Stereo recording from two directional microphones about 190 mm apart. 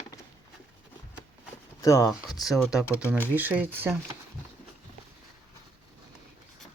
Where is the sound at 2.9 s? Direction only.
10° left (ahead or behind).